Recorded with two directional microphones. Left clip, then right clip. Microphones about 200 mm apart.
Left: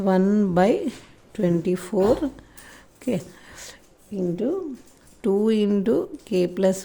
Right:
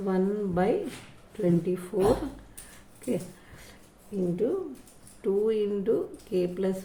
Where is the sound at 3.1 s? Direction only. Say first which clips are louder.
Left 4 dB; 55° left (ahead or behind).